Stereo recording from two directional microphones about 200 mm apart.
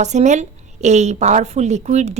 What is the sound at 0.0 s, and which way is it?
A woman's voice, 35° right (ahead or behind).